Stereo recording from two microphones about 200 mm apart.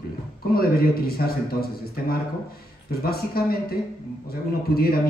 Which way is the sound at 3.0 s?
50° left (ahead or behind).